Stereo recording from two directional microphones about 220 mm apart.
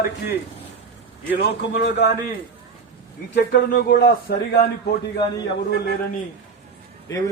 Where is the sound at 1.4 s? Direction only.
50° left (ahead or behind).